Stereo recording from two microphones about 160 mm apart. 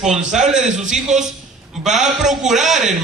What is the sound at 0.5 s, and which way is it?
Speech, 50° right (ahead or behind).